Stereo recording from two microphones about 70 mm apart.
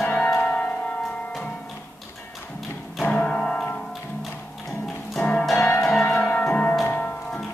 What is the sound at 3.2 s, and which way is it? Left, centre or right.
Music, centre.